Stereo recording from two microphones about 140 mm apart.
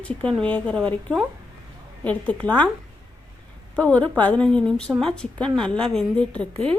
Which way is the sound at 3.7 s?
10° left (ahead or behind).